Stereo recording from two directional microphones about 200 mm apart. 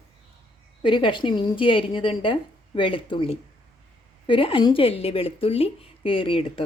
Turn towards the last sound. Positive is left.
turn(degrees=25)  # may be behind; listen again after turning